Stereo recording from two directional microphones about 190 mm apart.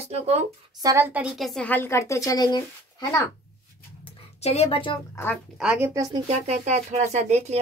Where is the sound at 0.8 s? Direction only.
15° right (ahead or behind); by 3.3 s 20° left (ahead or behind).